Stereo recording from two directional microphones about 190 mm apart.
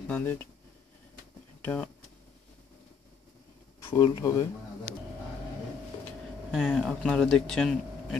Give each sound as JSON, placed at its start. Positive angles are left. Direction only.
{"t": 0.1, "sound": "speech", "side_deg": 10}
{"t": 1.6, "sound": "speech", "side_deg": 10}
{"t": 3.9, "sound": "speech", "side_deg": 15}
{"t": 6.5, "sound": "speech", "side_deg": -5}